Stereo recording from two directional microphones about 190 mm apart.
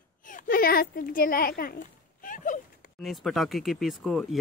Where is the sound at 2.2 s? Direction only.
45° left (ahead or behind).